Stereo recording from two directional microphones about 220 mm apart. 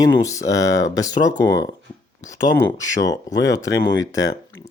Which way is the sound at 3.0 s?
15° left (ahead or behind).